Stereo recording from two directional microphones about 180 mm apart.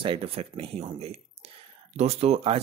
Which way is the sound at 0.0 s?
30° right (ahead or behind).